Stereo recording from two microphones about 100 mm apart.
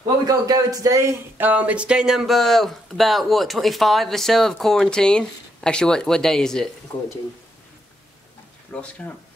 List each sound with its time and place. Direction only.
0.3 s a man's voice: 40° right (ahead or behind)
1.4 s speech: 15° right (ahead or behind); by 6.7 s 5° left (ahead or behind)
8.7 s speech: 10° left (ahead or behind)